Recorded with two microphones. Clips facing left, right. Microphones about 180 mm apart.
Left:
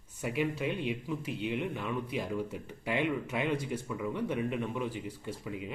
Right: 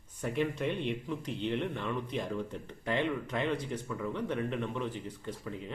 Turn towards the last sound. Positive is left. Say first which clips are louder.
# left 1 dB
turn(degrees=10)  # may be behind; listen again after turning